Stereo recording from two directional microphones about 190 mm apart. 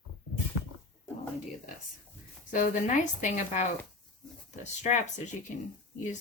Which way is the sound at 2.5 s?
45° left (ahead or behind).